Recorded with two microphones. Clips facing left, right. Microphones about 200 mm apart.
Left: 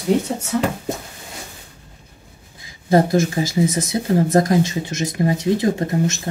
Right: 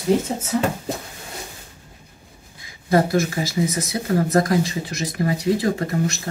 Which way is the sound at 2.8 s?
25° left (ahead or behind).